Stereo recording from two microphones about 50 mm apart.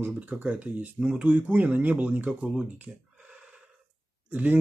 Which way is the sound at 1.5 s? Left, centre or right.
Right.